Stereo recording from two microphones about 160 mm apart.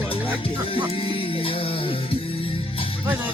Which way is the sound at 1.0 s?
35° left (ahead or behind).